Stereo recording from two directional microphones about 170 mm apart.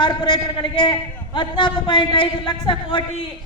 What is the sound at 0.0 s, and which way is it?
A man's voice, 25° left (ahead or behind).